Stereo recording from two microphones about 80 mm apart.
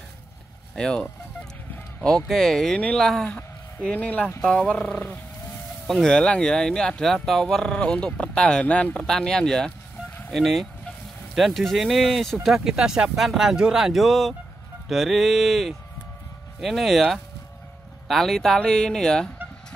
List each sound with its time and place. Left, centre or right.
0.7 s speech: centre